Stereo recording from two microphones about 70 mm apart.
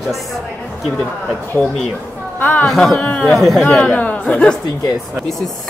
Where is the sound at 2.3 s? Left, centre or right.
Left.